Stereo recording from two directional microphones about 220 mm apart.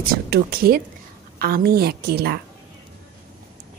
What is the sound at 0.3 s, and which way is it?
Speech, 45° right (ahead or behind).